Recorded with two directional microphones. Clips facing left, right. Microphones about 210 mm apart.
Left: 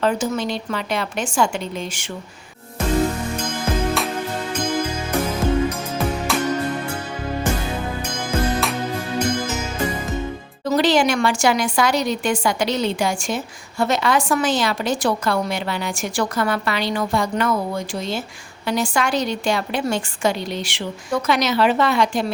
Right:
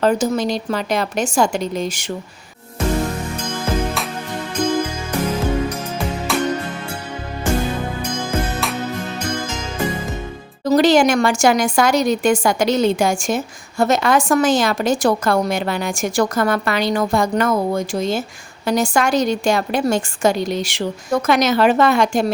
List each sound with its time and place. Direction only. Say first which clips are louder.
0.0 s a woman's voice: right 4 dB; 40° right (ahead or behind)
10.7 s a woman's voice: right 4 dB; 45° right (ahead or behind)